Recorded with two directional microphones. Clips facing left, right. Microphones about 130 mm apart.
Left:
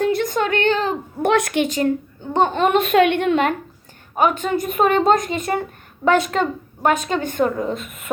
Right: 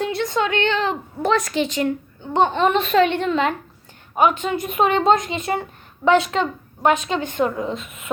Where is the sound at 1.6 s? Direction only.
40° left (ahead or behind); by 3.5 s 55° left (ahead or behind).